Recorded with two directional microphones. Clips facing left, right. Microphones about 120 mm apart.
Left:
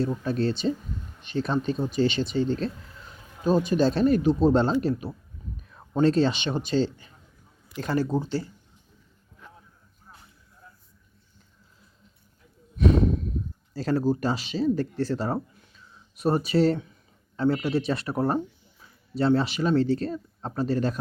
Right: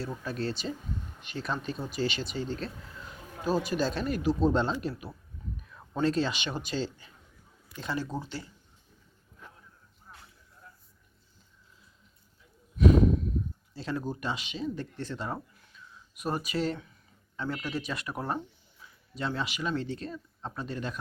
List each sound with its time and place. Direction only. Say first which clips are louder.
0.0 s speech: left 8 dB; 30° left (ahead or behind)
7.8 s speech: left 8 dB; 45° left (ahead or behind)
8.0 s speech: left 10 dB; 30° left (ahead or behind)
13.7 s speech: left 10 dB; 40° left (ahead or behind)
15.6 s a sound: even; 30° left (ahead or behind)
17.3 s speech: left 10 dB; 35° left (ahead or behind)